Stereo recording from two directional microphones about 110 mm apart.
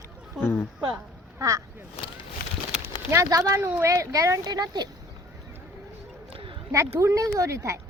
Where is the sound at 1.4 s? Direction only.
30° right (ahead or behind).